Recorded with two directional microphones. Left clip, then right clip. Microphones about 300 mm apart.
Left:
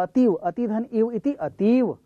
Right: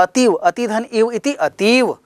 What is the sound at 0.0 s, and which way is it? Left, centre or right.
Speech, centre.